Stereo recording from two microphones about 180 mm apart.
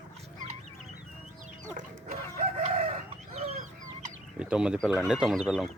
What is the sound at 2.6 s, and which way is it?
Chicken, 40° right (ahead or behind).